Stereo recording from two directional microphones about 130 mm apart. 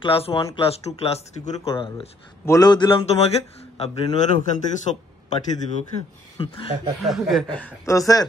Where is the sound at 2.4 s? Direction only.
25° left (ahead or behind).